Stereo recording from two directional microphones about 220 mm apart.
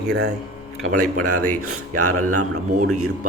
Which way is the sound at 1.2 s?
90° right.